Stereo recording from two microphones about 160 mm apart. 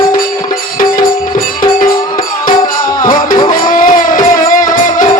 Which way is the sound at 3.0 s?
25° left (ahead or behind).